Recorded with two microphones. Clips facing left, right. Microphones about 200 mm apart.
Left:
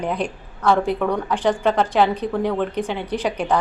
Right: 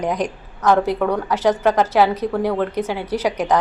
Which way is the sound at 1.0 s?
10° right (ahead or behind).